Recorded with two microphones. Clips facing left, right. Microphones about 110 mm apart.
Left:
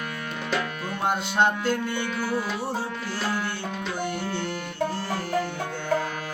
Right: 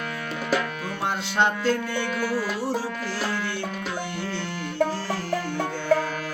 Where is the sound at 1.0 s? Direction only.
10° left (ahead or behind).